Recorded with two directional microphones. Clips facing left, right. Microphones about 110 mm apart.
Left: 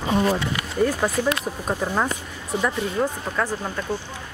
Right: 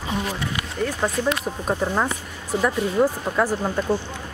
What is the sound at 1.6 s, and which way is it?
Speech, 10° right (ahead or behind).